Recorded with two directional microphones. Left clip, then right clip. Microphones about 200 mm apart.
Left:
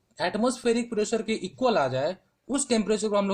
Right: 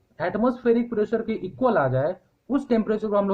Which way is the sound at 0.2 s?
30° left (ahead or behind).